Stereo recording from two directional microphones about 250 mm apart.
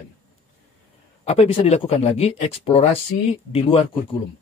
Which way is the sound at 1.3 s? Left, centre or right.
Left.